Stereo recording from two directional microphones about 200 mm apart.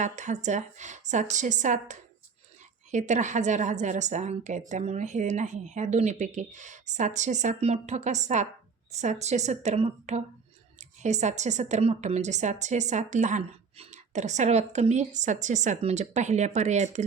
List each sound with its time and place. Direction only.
0.0 s a woman's voice: 35° right (ahead or behind)